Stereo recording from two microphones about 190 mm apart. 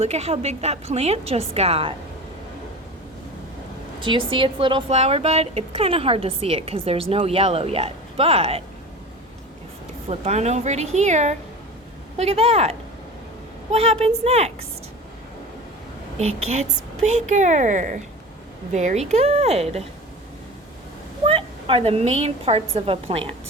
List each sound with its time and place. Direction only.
0.0 s a woman's voice: 35° right (ahead or behind)
4.0 s a woman's voice: 25° right (ahead or behind)
10.1 s a woman's voice: 35° right (ahead or behind)
16.1 s a woman's voice: 35° right (ahead or behind)
21.2 s a woman's voice: 30° right (ahead or behind)